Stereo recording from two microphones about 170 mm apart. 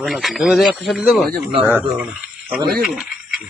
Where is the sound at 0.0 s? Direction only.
Centre (ahead or behind).